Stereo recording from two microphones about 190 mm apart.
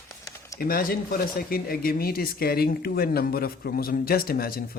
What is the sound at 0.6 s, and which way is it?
Speech, 50° left (ahead or behind).